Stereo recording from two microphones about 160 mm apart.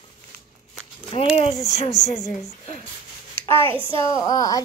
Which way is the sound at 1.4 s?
40° left (ahead or behind).